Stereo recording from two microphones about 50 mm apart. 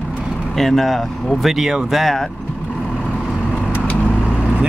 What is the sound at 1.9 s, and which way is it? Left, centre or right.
Speech, centre.